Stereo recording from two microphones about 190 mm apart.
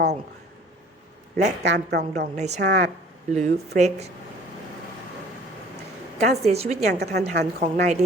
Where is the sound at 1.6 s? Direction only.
60° right (ahead or behind).